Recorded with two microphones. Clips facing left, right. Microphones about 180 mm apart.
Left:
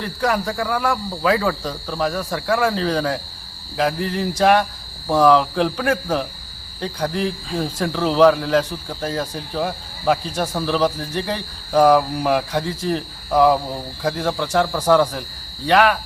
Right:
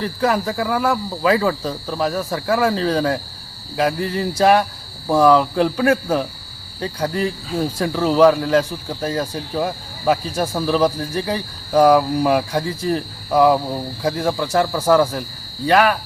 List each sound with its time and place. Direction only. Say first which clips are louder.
0.0 s speech: right 2 dB; 5° right (ahead or behind)